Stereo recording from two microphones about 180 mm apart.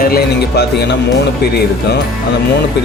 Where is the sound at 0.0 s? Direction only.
60° left (ahead or behind).